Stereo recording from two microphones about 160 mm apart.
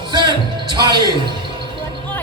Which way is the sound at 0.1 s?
30° right (ahead or behind).